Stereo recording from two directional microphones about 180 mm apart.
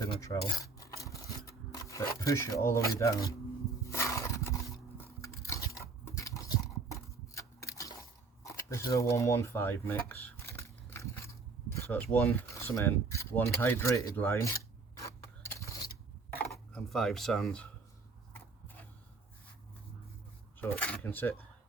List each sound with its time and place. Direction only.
0.2 s filing: 20° left (ahead or behind)
2.2 s speech: 15° left (ahead or behind)
3.8 s a sound: 15° left (ahead or behind)
4.9 s chewing: 15° left (ahead or behind)
5.6 s a sound: 20° left (ahead or behind)
8.4 s speech: 15° left (ahead or behind)
10.4 s a sound: 15° left (ahead or behind)
11.7 s speech: 15° left (ahead or behind)
15.0 s scrape: 15° left (ahead or behind)
16.5 s speech: centre (ahead or behind)
20.6 s speech: 10° left (ahead or behind)